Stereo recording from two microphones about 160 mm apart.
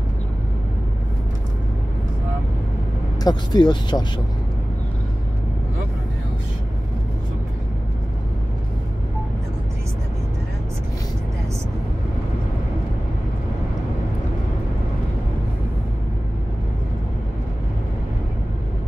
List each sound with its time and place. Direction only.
3.3 s speech: 25° left (ahead or behind)